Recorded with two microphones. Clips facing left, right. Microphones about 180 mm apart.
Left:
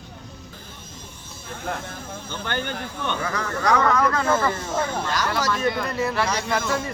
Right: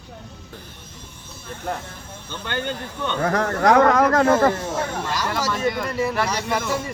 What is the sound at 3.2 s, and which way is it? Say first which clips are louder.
Speech: right 10 dB; 55° right (ahead or behind).